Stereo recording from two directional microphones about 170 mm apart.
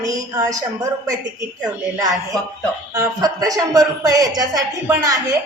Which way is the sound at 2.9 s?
20° right (ahead or behind).